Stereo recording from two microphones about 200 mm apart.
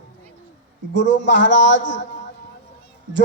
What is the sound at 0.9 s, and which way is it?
Speech, 65° left (ahead or behind).